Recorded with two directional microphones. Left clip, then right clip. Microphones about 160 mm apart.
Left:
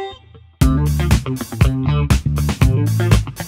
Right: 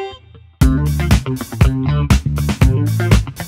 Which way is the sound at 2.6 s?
10° left (ahead or behind).